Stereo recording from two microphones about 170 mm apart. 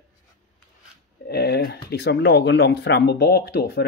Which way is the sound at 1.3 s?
65° left (ahead or behind).